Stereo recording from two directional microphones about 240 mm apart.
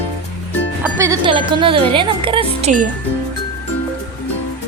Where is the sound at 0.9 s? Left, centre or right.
Centre.